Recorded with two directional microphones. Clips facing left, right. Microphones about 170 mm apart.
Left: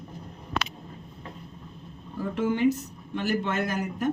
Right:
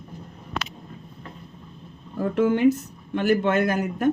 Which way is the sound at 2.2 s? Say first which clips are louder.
Right 5 dB; 55° right (ahead or behind).